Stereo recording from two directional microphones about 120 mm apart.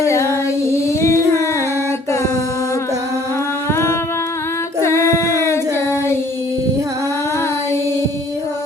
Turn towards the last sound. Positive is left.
turn(degrees=20)  # may be behind; listen again after turning